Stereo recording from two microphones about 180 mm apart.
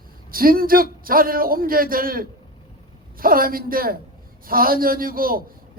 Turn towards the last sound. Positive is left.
turn(degrees=-55)  # may be behind; listen again after turning